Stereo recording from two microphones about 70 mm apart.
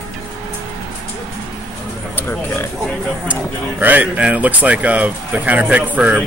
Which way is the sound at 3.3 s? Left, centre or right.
Right.